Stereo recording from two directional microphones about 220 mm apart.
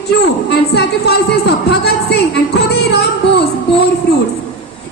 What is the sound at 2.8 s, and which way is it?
Speech, 50° left (ahead or behind).